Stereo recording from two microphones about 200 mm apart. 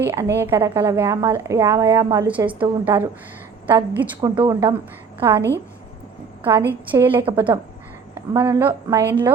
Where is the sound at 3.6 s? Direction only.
10° right (ahead or behind).